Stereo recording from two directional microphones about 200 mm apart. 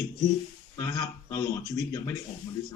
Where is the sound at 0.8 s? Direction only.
20° left (ahead or behind).